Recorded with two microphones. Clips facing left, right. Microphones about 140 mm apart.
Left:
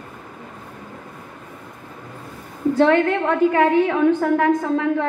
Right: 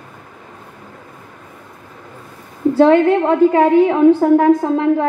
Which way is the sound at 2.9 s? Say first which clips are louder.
Right 6 dB; 30° right (ahead or behind).